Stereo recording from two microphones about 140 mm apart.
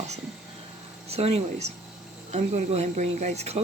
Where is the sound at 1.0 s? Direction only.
50° right (ahead or behind).